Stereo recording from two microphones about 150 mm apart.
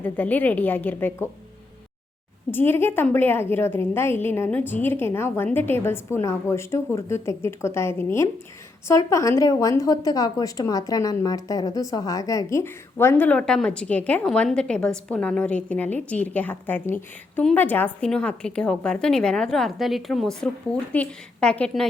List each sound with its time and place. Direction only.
0.0 s a woman's voice: 10° left (ahead or behind)
2.5 s a woman's voice: 15° left (ahead or behind)